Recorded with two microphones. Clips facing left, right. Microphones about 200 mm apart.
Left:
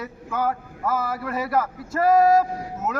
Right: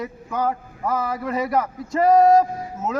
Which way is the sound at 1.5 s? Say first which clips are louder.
Right 1 dB; 20° right (ahead or behind).